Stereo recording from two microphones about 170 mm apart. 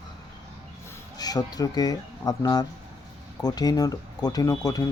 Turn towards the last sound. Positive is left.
turn(degrees=20)  # may be behind; listen again after turning